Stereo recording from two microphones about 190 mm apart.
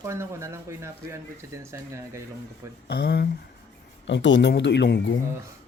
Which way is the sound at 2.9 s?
60° left (ahead or behind).